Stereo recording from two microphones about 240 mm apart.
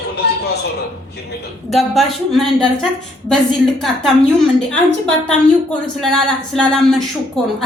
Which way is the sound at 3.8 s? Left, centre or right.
Centre.